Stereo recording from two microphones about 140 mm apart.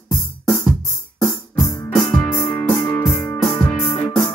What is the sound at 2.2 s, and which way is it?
Music, 30° left (ahead or behind).